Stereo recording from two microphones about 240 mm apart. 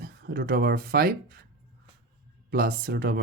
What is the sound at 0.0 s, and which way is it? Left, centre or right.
Speech, right.